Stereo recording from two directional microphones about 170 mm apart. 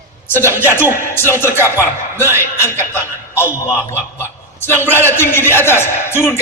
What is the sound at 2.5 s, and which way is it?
Speech, 15° left (ahead or behind).